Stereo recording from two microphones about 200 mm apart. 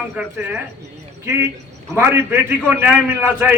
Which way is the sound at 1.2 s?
15° right (ahead or behind).